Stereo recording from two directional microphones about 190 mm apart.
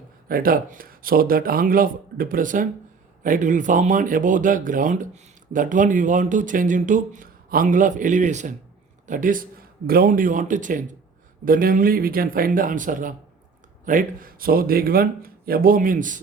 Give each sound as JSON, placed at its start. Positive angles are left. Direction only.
{"t": 0.3, "sound": "speech", "side_deg": -50}